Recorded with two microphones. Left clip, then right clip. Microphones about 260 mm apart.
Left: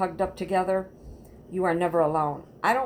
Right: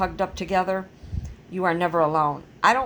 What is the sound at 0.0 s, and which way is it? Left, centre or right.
A woman's voice, right.